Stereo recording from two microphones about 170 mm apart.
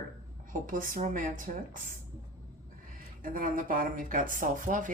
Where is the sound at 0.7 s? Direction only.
55° right (ahead or behind).